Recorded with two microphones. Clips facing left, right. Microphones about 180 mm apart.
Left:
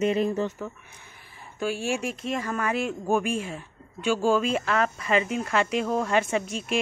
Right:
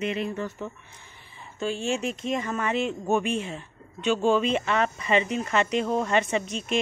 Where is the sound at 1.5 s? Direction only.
10° left (ahead or behind).